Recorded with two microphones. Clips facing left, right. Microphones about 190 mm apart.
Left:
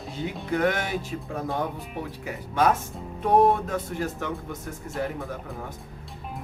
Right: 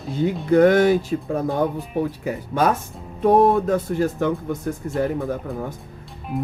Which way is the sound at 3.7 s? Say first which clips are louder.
Right 9 dB; 35° right (ahead or behind).